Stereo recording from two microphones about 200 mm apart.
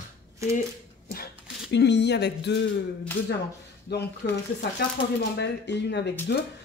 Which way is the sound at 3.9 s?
55° left (ahead or behind).